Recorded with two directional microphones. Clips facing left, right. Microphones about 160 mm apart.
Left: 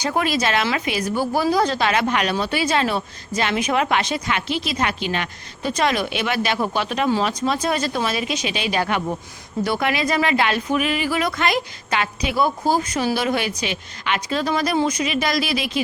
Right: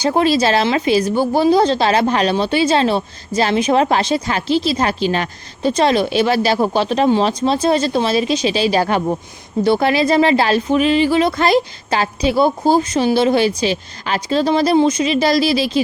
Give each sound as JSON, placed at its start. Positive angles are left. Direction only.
{"t": 0.0, "sound": "a woman's voice", "side_deg": -30}